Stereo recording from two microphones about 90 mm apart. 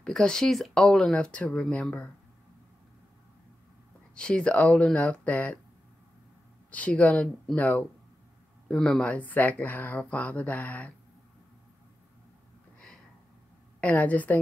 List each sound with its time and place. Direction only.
0.0 s speech: 10° left (ahead or behind)
4.1 s speech: 10° left (ahead or behind)
6.7 s speech: 15° left (ahead or behind)
12.7 s a sound: 10° left (ahead or behind)
13.7 s speech: 15° left (ahead or behind)